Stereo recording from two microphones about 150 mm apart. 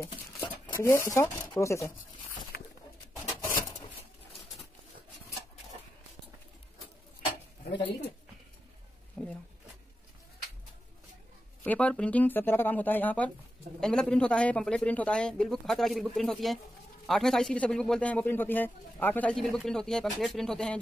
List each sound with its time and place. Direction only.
0.0 s speech: 15° left (ahead or behind)
3.3 s bird: 20° left (ahead or behind)
9.2 s a sound: 10° left (ahead or behind)
11.6 s a man's voice: 10° left (ahead or behind)